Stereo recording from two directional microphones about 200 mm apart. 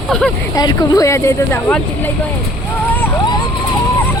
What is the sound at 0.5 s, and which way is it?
Speech, 20° left (ahead or behind).